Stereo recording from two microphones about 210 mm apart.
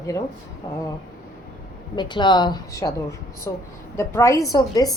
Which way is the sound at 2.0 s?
20° left (ahead or behind).